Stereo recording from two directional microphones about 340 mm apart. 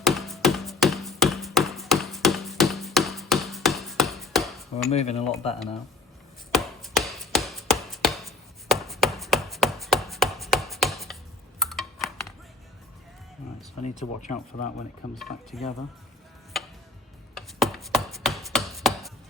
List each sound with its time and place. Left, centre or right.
0.0 s tap: centre
4.9 s speech: centre
6.5 s chopping: centre
11.6 s a sound: centre
14.0 s speech: left
15.1 s speech: centre
16.5 s music: centre
17.3 s chopping: centre